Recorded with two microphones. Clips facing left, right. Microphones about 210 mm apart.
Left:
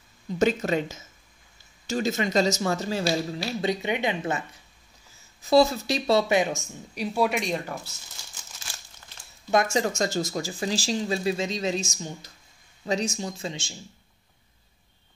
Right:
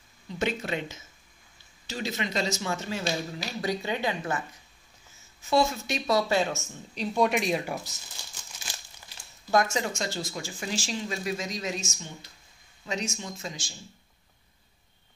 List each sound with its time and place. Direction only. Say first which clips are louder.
0.4 s speech: left 7 dB; 40° left (ahead or behind); by 4.4 s 20° left (ahead or behind)
5.4 s a woman's voice: left 5 dB; 35° left (ahead or behind); by 7.7 s 5° right (ahead or behind)
9.5 s speech: left 1 dB; 20° left (ahead or behind)
9.8 s speech: left 6 dB; 40° left (ahead or behind); by 13.7 s 25° left (ahead or behind)